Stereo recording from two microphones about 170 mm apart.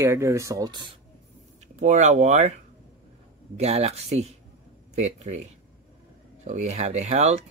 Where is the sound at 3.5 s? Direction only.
40° right (ahead or behind).